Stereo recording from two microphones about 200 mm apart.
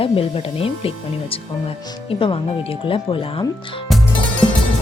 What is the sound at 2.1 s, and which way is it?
Speech, 25° left (ahead or behind).